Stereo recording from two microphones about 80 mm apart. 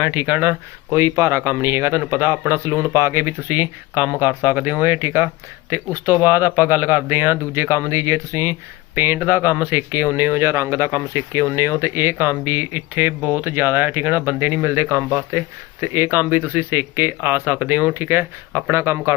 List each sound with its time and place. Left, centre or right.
0.0 s speech: right
0.9 s speech: right
9.0 s speech: right